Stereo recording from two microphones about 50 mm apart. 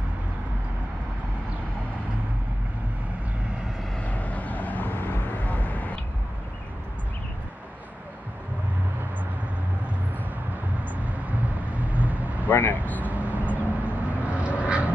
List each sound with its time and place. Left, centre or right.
4.0 s vehicle: left
11.1 s vehicle: right
12.4 s vehicle: left
13.1 s a sound: right
13.8 s vehicle: right